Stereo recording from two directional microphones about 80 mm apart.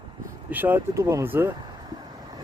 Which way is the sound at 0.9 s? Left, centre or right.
Right.